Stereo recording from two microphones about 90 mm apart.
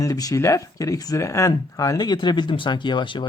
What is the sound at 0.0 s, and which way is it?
Speech, 40° left (ahead or behind).